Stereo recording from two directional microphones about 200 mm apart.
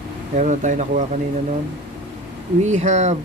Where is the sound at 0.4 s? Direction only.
40° right (ahead or behind).